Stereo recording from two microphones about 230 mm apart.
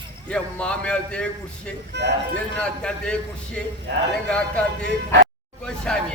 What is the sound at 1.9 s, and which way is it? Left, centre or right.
Speech, right.